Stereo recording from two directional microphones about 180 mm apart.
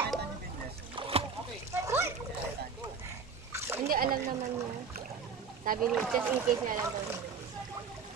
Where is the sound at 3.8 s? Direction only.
55° right (ahead or behind).